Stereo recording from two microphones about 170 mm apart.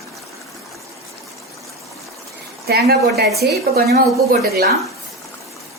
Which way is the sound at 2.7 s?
70° right (ahead or behind).